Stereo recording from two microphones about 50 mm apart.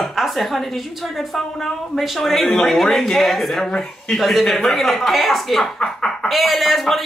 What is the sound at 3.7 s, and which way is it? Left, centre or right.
Speech, centre.